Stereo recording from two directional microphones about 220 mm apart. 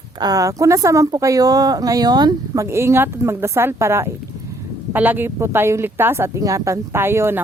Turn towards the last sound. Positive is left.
turn(degrees=-10)  # may be behind; listen again after turning